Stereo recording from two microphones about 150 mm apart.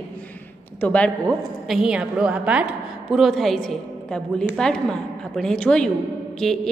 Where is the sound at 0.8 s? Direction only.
10° left (ahead or behind).